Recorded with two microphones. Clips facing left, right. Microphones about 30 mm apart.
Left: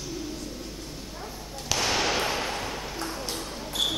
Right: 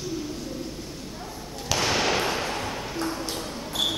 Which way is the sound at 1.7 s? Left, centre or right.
Centre.